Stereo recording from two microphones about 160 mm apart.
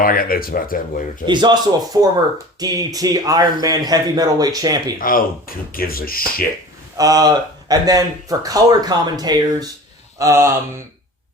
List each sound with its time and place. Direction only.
0.0 s speech: 65° left (ahead or behind)
1.3 s speech: 30° right (ahead or behind)
4.9 s speech: 60° left (ahead or behind)
6.9 s speech: 25° right (ahead or behind)